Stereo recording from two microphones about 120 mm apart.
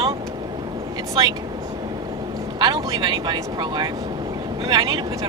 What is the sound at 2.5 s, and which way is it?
Speech, 35° right (ahead or behind).